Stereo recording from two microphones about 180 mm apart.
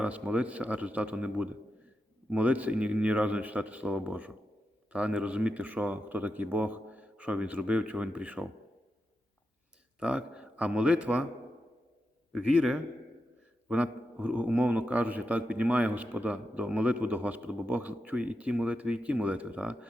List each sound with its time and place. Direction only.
0.0 s a man's voice: 5° right (ahead or behind)
10.0 s a man's voice: 5° right (ahead or behind)
12.3 s a man's voice: 5° right (ahead or behind)